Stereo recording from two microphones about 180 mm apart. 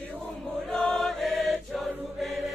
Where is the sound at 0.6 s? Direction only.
5° left (ahead or behind).